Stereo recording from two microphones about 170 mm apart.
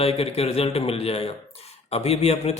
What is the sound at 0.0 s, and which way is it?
A man's voice, 35° left (ahead or behind).